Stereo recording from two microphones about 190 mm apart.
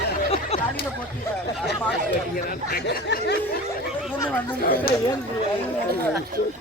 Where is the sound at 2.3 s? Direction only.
55° left (ahead or behind).